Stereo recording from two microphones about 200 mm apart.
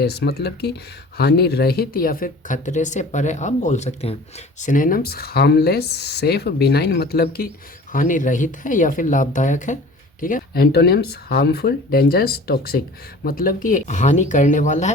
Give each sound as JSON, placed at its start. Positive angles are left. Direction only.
{"t": 0.0, "sound": "speech", "side_deg": 55}
{"t": 4.6, "sound": "speech", "side_deg": 40}
{"t": 7.9, "sound": "speech", "side_deg": 40}